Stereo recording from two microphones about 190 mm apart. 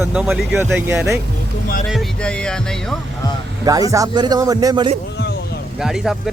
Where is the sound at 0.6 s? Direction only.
10° right (ahead or behind).